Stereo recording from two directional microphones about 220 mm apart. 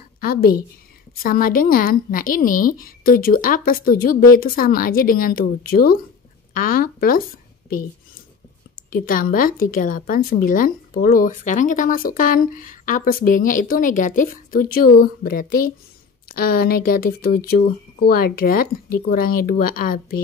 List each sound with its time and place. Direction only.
0.2 s a woman's voice: 40° left (ahead or behind)
8.9 s speech: 40° left (ahead or behind)